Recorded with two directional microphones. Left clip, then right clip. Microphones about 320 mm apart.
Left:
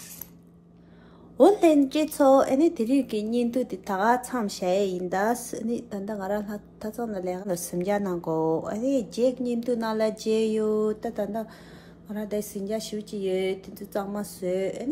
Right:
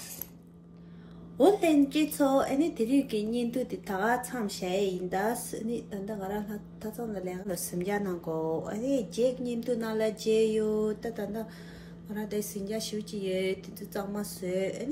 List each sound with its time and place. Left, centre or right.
1.4 s a woman's voice: centre